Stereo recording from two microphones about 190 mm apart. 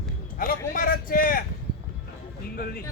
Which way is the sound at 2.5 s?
55° left (ahead or behind).